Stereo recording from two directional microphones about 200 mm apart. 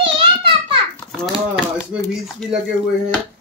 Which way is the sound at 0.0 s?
25° right (ahead or behind).